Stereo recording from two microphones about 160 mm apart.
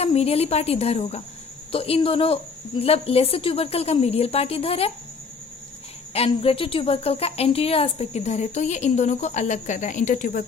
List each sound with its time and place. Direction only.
0.0 s a woman's voice: 40° left (ahead or behind)
6.1 s speech: 35° left (ahead or behind); by 10.4 s 55° left (ahead or behind)